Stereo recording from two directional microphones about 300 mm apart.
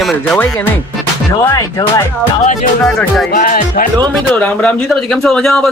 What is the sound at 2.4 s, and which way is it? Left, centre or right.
Music, left.